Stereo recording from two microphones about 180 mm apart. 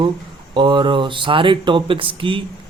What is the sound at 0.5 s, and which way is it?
A man's voice, 25° right (ahead or behind).